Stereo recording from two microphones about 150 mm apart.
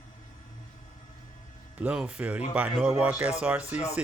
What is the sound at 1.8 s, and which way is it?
Speech, 5° right (ahead or behind).